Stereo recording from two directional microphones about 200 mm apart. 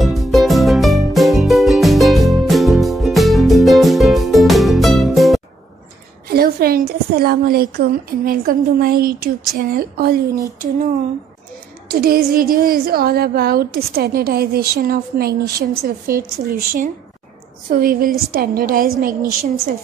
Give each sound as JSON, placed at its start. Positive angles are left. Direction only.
{"t": 0.0, "sound": "music", "side_deg": 0}
{"t": 6.2, "sound": "a woman's voice", "side_deg": -50}
{"t": 11.9, "sound": "a woman's voice", "side_deg": -50}